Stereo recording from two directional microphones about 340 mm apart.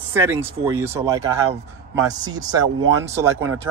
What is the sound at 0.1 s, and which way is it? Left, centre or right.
Speech, centre.